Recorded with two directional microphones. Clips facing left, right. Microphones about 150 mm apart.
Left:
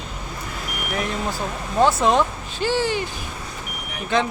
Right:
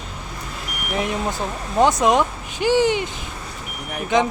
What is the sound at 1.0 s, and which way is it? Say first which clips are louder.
Speech: right 3 dB; 20° right (ahead or behind).